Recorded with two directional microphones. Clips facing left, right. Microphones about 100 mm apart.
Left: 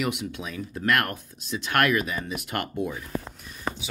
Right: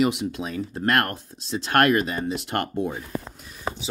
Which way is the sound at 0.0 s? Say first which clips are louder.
Right 6 dB; 35° right (ahead or behind).